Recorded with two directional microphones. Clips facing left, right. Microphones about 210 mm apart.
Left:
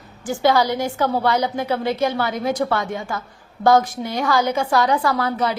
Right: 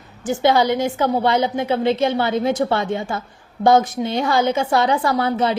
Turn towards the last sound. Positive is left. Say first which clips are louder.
# right 2 dB
turn(degrees=-25)  # may be behind; listen again after turning